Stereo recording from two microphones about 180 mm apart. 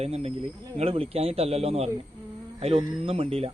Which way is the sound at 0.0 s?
35° right (ahead or behind).